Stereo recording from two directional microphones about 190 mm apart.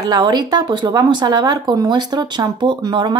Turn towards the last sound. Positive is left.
turn(degrees=-20)  # may be behind; listen again after turning